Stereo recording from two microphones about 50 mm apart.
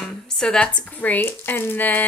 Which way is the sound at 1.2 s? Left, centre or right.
Left.